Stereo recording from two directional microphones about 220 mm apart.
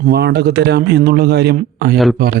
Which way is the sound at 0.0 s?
45° right (ahead or behind).